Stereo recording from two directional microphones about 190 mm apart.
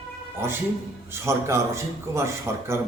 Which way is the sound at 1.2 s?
15° right (ahead or behind).